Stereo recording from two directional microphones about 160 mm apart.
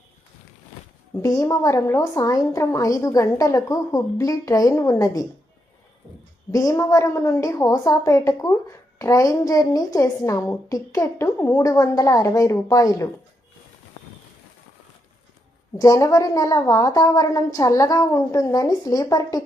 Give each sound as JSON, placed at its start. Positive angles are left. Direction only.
{"t": 1.2, "sound": "a woman's voice", "side_deg": 20}
{"t": 6.5, "sound": "a woman's voice", "side_deg": 20}
{"t": 15.8, "sound": "a woman's voice", "side_deg": 20}